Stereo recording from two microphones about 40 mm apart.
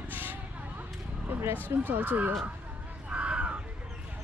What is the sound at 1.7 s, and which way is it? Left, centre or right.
Speech, right.